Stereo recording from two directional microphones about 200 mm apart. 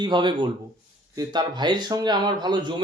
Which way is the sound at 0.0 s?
20° right (ahead or behind).